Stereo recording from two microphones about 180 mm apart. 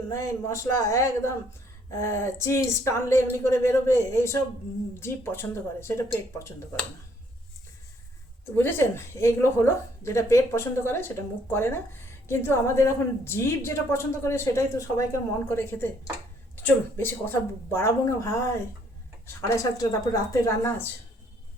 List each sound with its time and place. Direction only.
0.1 s a woman's voice: 15° left (ahead or behind)
8.5 s a woman's voice: 15° left (ahead or behind)